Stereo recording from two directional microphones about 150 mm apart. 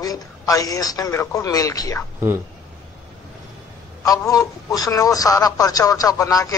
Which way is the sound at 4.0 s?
25° left (ahead or behind).